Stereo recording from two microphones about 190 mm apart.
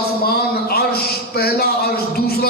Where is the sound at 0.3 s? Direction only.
55° left (ahead or behind).